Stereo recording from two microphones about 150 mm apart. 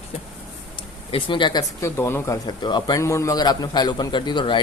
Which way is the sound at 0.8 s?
35° left (ahead or behind).